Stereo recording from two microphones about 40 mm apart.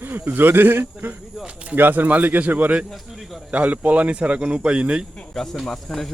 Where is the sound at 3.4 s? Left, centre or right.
Right.